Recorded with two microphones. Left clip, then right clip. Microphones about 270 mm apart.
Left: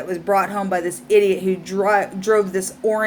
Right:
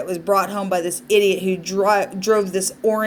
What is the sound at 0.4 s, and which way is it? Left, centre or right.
Speech, centre.